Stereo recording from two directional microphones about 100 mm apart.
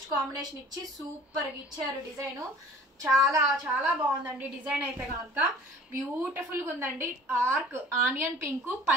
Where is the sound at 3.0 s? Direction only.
35° right (ahead or behind).